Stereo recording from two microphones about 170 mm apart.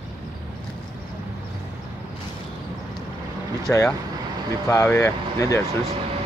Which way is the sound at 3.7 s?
15° left (ahead or behind).